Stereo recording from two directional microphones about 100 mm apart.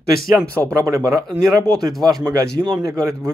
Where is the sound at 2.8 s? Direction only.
25° right (ahead or behind).